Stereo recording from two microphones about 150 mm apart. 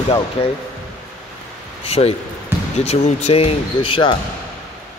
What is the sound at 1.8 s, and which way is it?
Speech, 40° left (ahead or behind).